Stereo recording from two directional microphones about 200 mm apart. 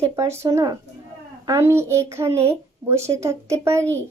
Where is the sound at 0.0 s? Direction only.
15° right (ahead or behind).